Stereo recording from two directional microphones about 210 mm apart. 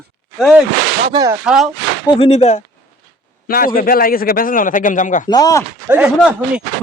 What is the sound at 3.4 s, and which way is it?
A man's voice, 45° left (ahead or behind).